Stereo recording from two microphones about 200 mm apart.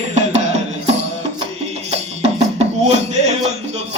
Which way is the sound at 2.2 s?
35° right (ahead or behind).